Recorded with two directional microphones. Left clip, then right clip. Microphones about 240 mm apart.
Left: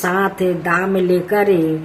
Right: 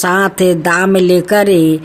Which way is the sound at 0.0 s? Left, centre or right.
Right.